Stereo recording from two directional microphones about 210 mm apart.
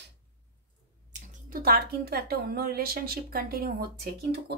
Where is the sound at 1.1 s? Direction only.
40° right (ahead or behind).